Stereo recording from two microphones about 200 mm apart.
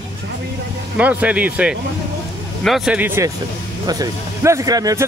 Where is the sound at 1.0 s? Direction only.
5° right (ahead or behind).